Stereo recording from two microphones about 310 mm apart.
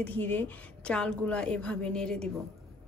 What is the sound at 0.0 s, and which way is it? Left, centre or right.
A woman's voice, centre.